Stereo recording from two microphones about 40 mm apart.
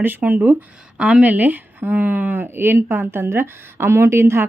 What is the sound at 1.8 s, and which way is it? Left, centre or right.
Speech, right.